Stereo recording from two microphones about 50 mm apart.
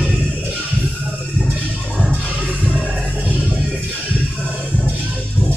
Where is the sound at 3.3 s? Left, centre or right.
Right.